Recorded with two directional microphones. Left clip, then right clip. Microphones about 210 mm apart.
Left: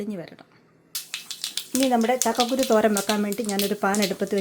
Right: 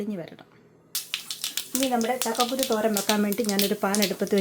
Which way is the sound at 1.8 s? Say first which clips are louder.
Left 4 dB; 45° left (ahead or behind).